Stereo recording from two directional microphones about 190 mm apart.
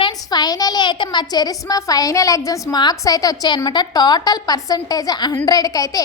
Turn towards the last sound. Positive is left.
turn(degrees=20)  # may be behind; listen again after turning